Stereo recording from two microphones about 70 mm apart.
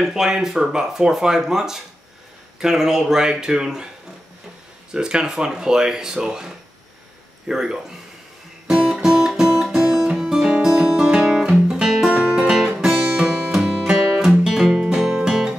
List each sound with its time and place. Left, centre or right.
0.0 s speech: centre
4.9 s speech: centre
8.6 s music: centre
9.7 s guitar: centre
12.1 s music: centre
12.4 s music: centre